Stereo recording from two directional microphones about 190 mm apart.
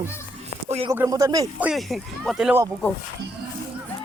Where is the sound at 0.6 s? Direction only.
35° right (ahead or behind).